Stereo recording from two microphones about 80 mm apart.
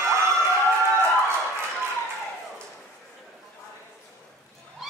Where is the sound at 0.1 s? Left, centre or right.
Right.